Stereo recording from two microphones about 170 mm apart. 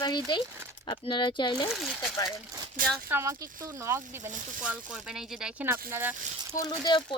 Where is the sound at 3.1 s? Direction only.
15° right (ahead or behind).